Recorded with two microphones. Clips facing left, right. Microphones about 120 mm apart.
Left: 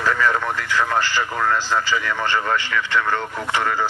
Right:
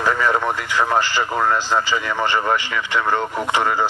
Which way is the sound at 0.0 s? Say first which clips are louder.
Right 2 dB; 20° right (ahead or behind).